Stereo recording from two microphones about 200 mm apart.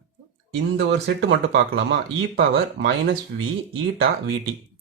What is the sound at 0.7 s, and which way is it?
Speech, 60° right (ahead or behind).